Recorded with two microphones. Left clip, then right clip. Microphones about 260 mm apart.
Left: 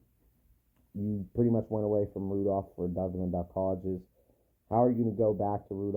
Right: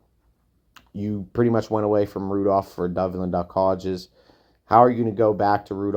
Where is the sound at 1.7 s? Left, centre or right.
Right.